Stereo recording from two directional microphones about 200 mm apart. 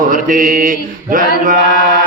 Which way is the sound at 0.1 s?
45° right (ahead or behind).